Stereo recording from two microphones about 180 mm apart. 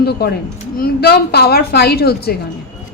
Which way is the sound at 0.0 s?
65° left (ahead or behind).